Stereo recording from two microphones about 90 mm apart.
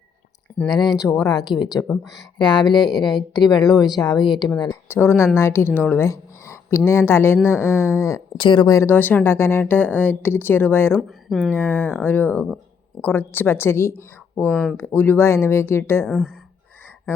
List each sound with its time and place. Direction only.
1.2 s a woman's voice: 50° left (ahead or behind)
1.9 s speech: centre (ahead or behind)
2.4 s a woman's voice: 55° left (ahead or behind)
4.9 s speech: 30° left (ahead or behind)
8.4 s speech: 70° left (ahead or behind)
8.6 s speech: 35° left (ahead or behind)
8.9 s speech: 20° left (ahead or behind)
10.9 s speech: centre (ahead or behind)
11.5 s speech: 20° left (ahead or behind)
14.5 s speech: 5° left (ahead or behind)
14.8 s speech: 25° left (ahead or behind)
16.0 s speech: 5° right (ahead or behind)